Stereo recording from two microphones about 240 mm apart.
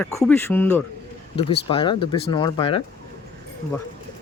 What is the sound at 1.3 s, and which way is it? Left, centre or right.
Speech, left.